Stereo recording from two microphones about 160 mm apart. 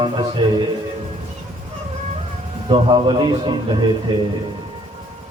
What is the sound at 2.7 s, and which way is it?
A man's voice, 30° right (ahead or behind).